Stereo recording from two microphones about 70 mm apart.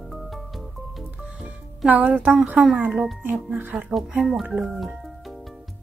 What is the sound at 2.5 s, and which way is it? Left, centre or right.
Speech, centre.